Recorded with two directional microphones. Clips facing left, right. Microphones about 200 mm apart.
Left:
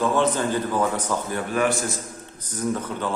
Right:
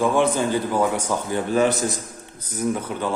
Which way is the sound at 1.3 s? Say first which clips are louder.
Right 5 dB; 20° right (ahead or behind).